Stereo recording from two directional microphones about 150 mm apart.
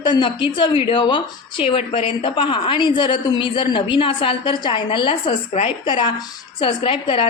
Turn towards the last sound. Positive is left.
turn(degrees=35)  # may be behind; listen again after turning